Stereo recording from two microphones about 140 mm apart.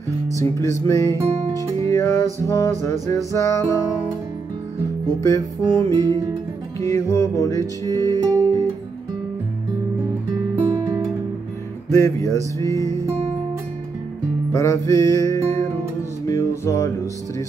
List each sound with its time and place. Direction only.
0.4 s music: 20° left (ahead or behind)
1.5 s music: 25° right (ahead or behind)
1.9 s music: 20° left (ahead or behind)
5.2 s music: 25° left (ahead or behind)
5.9 s music: 25° right (ahead or behind)
6.8 s music: 20° left (ahead or behind)
8.2 s music: 25° right (ahead or behind)
10.7 s music: 25° right (ahead or behind)
11.9 s music: 20° left (ahead or behind)
14.5 s music: 25° left (ahead or behind)